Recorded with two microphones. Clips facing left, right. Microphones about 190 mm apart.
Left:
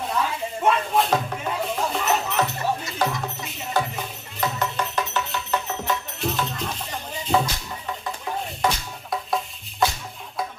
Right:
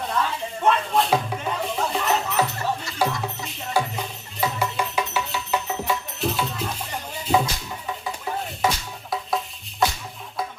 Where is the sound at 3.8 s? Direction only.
10° right (ahead or behind).